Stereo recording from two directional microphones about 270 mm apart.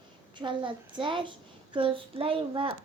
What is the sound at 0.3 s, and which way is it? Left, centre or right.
A woman's voice, centre.